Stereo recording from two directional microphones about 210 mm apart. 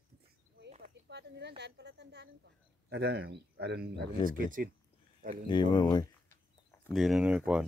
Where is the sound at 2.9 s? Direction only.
50° right (ahead or behind).